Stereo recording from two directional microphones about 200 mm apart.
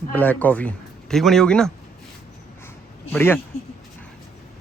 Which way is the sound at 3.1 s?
10° left (ahead or behind).